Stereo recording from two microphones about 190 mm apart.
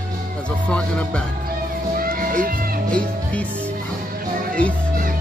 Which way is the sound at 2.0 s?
50° right (ahead or behind).